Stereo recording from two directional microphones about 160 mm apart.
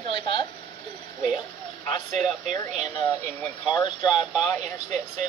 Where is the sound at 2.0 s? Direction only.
50° right (ahead or behind).